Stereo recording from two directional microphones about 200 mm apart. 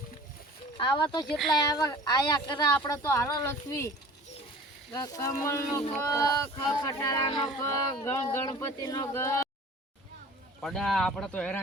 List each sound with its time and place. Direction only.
0.8 s speech: 25° left (ahead or behind)
1.3 s speech: centre (ahead or behind)
1.5 s speech: 20° left (ahead or behind)
4.9 s speech: 20° left (ahead or behind)
10.6 s speech: centre (ahead or behind)